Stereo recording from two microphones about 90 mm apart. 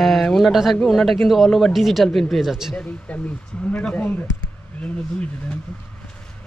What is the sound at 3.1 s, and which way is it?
Speech, 15° left (ahead or behind).